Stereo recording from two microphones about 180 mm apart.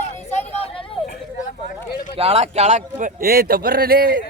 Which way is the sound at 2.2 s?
35° right (ahead or behind).